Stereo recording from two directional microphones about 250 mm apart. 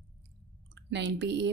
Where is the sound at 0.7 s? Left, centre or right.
Right.